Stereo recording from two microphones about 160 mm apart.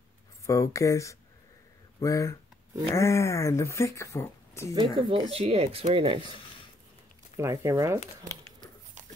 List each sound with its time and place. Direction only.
0.5 s speech: 20° left (ahead or behind)
4.7 s speech: 30° right (ahead or behind)
7.3 s speech: 20° right (ahead or behind)